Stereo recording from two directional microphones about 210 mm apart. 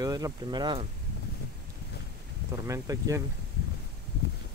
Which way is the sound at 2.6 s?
15° right (ahead or behind).